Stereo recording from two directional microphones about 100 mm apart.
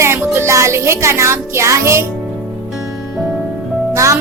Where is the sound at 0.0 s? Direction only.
25° right (ahead or behind).